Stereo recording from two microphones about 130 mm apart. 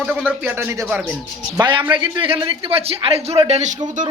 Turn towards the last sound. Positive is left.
turn(degrees=-60)  # may be behind; listen again after turning